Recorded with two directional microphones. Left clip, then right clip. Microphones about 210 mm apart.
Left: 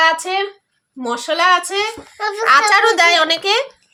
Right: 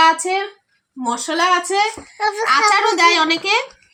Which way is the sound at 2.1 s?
10° left (ahead or behind).